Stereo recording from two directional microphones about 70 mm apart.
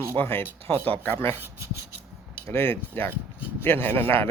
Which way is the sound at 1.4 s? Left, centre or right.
Right.